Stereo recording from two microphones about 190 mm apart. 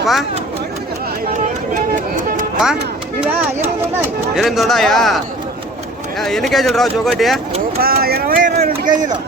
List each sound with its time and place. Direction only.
0.0 s speech: centre (ahead or behind)
1.7 s music: 45° right (ahead or behind)
4.4 s speech: centre (ahead or behind)
7.8 s speech: 50° right (ahead or behind)